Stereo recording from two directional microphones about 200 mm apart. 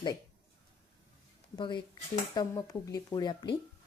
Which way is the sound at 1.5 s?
20° left (ahead or behind).